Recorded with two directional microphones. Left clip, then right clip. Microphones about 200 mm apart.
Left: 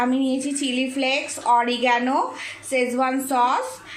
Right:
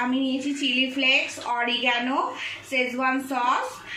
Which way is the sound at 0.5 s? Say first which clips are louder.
Even; 55° left (ahead or behind).